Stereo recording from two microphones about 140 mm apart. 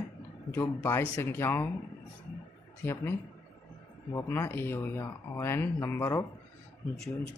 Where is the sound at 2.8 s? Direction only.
15° left (ahead or behind).